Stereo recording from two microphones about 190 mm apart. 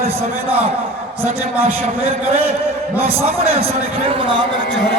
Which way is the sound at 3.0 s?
30° right (ahead or behind).